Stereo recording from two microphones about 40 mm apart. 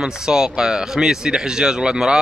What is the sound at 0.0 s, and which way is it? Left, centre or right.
A man's voice, centre.